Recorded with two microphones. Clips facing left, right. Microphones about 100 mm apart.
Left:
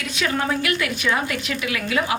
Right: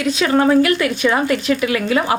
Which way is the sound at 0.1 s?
35° right (ahead or behind).